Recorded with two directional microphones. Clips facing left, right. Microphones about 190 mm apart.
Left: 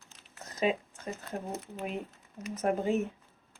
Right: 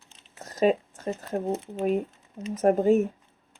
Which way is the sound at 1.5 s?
25° right (ahead or behind).